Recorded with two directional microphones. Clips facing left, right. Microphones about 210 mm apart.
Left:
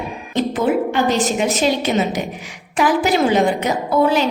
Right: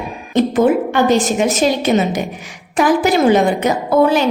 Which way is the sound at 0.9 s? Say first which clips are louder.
Right 4 dB; 50° right (ahead or behind).